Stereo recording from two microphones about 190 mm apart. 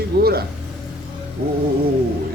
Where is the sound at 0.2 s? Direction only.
55° right (ahead or behind).